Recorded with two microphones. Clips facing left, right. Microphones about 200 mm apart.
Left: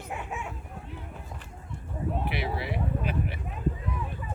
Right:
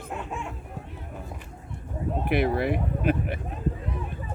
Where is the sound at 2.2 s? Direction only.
50° right (ahead or behind).